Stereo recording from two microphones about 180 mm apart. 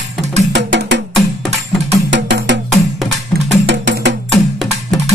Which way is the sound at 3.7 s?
80° right.